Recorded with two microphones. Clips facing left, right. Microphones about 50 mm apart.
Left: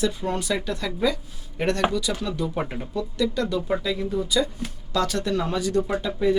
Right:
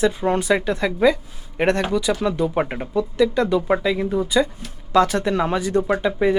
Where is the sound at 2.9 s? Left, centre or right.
Right.